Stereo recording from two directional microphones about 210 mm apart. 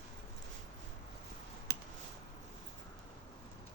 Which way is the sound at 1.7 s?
50° right (ahead or behind).